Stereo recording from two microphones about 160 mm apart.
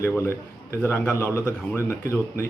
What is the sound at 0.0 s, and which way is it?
A man's voice, 15° left (ahead or behind).